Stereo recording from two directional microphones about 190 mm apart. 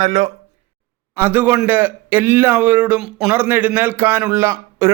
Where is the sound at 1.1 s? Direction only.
10° right (ahead or behind).